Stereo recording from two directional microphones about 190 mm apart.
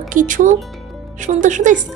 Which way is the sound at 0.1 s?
45° right (ahead or behind).